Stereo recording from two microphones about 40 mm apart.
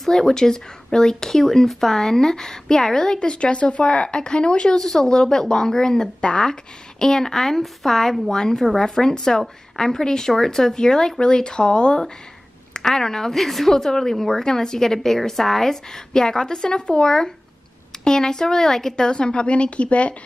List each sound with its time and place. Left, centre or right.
0.0 s speech: centre
4.7 s a woman's voice: centre; by 12.0 s left
12.7 s a woman's voice: centre; by 20.2 s left